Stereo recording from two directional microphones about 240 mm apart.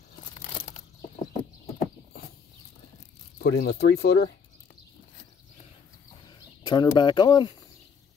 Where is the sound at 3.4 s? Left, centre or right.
Left.